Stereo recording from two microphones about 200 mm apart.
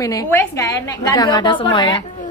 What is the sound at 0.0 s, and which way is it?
A woman's voice, 15° left (ahead or behind).